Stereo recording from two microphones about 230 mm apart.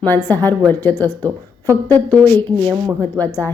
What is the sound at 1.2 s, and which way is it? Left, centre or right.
Speech, centre.